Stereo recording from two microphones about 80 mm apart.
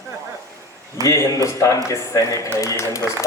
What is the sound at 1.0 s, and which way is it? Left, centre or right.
A man's voice, left.